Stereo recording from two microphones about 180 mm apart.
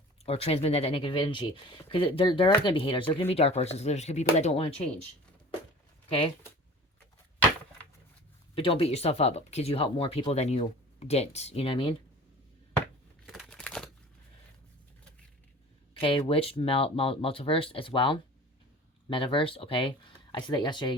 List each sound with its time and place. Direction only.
0.3 s speech: 35° left (ahead or behind)
6.1 s speech: 30° left (ahead or behind)
8.5 s speech: 30° left (ahead or behind)
13.2 s crumpling: centre (ahead or behind)
16.0 s speech: 30° left (ahead or behind)